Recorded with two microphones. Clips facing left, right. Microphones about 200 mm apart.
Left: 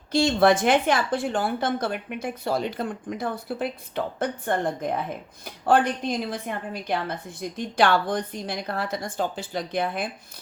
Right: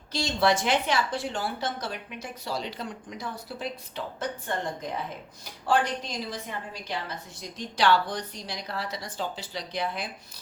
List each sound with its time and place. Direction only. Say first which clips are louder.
0.1 s a woman's voice: left 6 dB; 55° left (ahead or behind)